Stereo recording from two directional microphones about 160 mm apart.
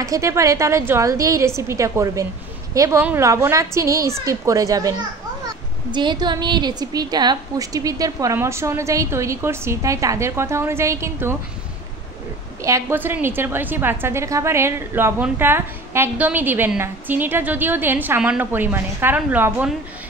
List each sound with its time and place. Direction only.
0.0 s a woman's voice: 20° right (ahead or behind)
12.6 s a woman's voice: 15° right (ahead or behind)